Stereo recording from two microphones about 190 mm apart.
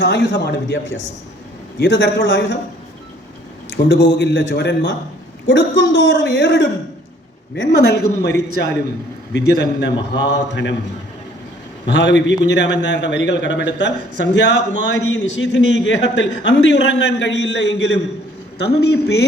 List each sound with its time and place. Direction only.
0.0 s speech: 65° left (ahead or behind)
3.7 s a man's voice: 65° left (ahead or behind)
11.9 s a man's voice: 70° left (ahead or behind)